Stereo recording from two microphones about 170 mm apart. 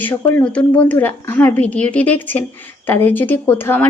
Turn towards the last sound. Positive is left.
turn(degrees=10)  # may be behind; listen again after turning